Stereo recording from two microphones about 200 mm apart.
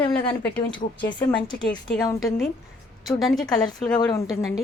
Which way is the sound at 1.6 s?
5° left (ahead or behind).